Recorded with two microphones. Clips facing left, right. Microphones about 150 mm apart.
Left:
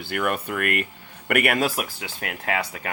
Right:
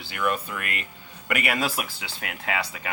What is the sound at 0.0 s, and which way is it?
Speech, 55° left (ahead or behind).